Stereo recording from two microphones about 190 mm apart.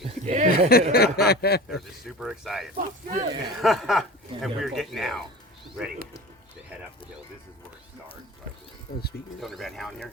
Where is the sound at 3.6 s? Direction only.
Centre (ahead or behind).